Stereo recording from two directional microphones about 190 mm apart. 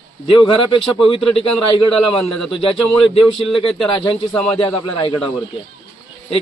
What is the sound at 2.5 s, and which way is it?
Speech, 30° left (ahead or behind).